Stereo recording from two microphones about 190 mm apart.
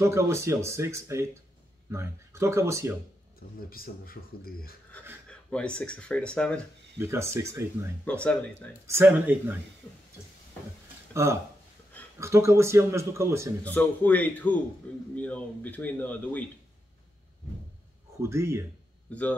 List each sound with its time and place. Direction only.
0.0 s speech: 15° right (ahead or behind)
3.3 s speech: 50° left (ahead or behind)
5.5 s speech: 5° left (ahead or behind)
7.0 s speech: 15° right (ahead or behind)
8.0 s speech: 5° left (ahead or behind)
8.8 s speech: 10° right (ahead or behind)
12.2 s speech: 15° right (ahead or behind)
13.7 s speech: 10° left (ahead or behind)
18.2 s speech: 15° right (ahead or behind)